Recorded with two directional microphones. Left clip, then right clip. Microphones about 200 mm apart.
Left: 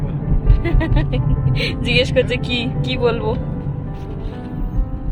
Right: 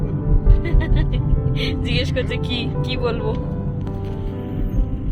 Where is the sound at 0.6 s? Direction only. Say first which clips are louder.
Left 8 dB; 25° left (ahead or behind).